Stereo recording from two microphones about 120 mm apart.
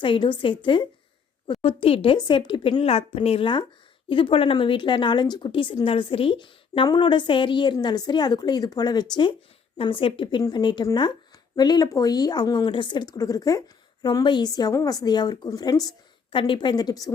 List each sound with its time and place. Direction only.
0.0 s speech: 45° left (ahead or behind)
16.3 s speech: 45° left (ahead or behind)